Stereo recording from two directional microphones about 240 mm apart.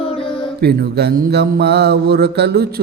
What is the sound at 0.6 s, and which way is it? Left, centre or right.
Mantra, right.